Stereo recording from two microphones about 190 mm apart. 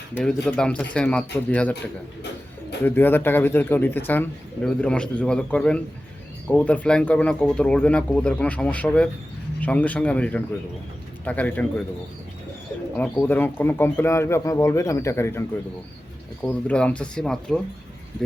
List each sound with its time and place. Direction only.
0.1 s speech: 5° left (ahead or behind)
2.8 s a man's voice: 10° left (ahead or behind)
13.0 s a man's voice: 10° left (ahead or behind)